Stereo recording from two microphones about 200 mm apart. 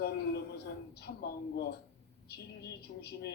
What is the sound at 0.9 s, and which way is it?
Speech, 55° left (ahead or behind).